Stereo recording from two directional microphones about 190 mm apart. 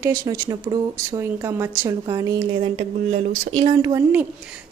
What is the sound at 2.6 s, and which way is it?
Speech, 30° right (ahead or behind).